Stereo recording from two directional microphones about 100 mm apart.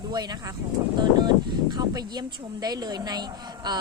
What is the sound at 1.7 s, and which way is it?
Speech, 45° right (ahead or behind).